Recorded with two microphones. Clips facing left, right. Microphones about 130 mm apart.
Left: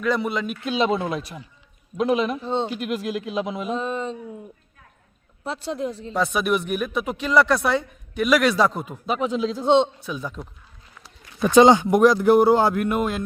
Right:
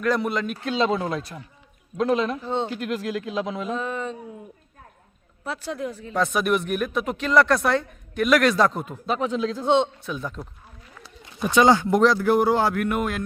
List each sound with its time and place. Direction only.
0.0 s speech: centre (ahead or behind)
0.6 s a man's voice: 20° left (ahead or behind)
5.4 s speech: 25° left (ahead or behind)
6.1 s speech: 5° left (ahead or behind); by 9.9 s 20° left (ahead or behind)
10.1 s speech: 5° left (ahead or behind)
11.5 s speech: 20° left (ahead or behind)